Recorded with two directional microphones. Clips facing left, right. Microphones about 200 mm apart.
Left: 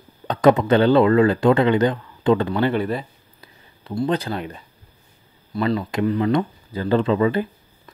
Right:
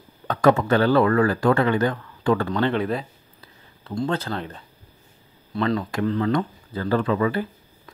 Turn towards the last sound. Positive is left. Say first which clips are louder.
# left 3 dB
turn(degrees=25)  # may be behind; listen again after turning